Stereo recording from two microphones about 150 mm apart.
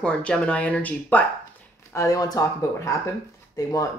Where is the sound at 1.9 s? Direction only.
20° left (ahead or behind).